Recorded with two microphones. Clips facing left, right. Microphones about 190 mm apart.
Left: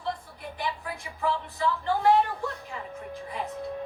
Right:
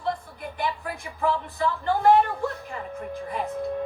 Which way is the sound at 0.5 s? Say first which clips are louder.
Right 4 dB; 50° right (ahead or behind).